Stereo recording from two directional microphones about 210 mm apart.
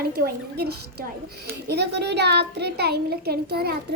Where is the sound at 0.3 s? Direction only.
50° right (ahead or behind).